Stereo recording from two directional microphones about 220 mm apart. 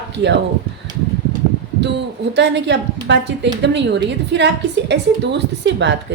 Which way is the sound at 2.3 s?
50° right (ahead or behind).